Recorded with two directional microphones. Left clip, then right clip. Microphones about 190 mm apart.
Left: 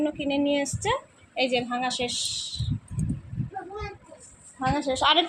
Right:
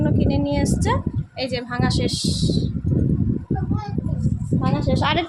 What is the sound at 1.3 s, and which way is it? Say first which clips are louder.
Speech: left 2 dB; 40° right (ahead or behind).